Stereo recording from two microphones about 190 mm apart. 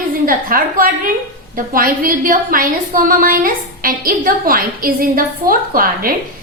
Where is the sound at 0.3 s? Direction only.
50° right (ahead or behind).